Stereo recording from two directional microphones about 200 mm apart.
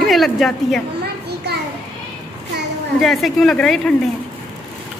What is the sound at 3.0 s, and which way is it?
Speech, centre (ahead or behind).